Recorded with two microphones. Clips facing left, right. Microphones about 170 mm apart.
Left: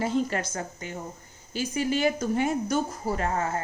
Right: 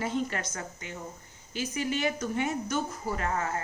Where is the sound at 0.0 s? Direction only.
35° left (ahead or behind).